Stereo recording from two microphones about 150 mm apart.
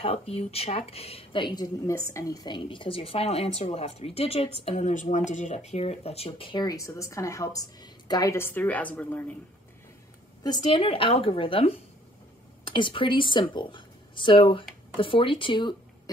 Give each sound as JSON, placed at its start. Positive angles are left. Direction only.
{"t": 0.0, "sound": "speech", "side_deg": 40}
{"t": 4.6, "sound": "a woman's voice", "side_deg": 50}
{"t": 10.4, "sound": "speech", "side_deg": 30}